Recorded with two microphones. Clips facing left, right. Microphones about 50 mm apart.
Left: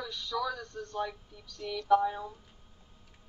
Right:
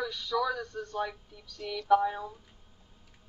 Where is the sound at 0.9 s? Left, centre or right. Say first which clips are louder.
Right 1 dB; centre.